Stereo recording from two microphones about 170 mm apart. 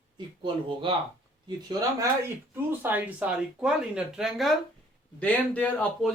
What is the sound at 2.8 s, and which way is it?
A man's voice, 10° right (ahead or behind).